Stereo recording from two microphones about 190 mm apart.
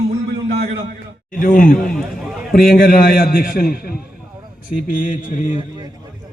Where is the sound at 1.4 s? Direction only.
45° left (ahead or behind).